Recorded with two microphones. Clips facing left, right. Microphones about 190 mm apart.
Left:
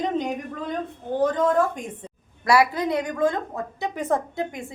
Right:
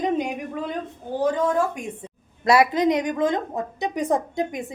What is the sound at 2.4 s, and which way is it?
A woman's voice, 20° right (ahead or behind).